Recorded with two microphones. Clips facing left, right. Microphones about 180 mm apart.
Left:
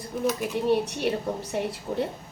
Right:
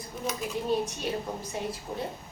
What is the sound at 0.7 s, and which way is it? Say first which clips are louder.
A woman's voice: left 6 dB; 70° left (ahead or behind).